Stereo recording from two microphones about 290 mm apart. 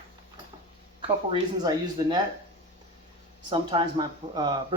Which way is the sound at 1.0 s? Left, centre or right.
Centre.